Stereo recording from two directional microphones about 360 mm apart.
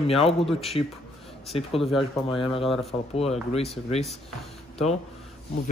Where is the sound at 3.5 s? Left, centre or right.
Centre.